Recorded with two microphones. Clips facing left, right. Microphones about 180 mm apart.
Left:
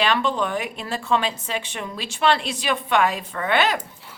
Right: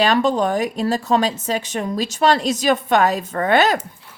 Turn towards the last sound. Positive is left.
turn(degrees=-45)  # may be behind; listen again after turning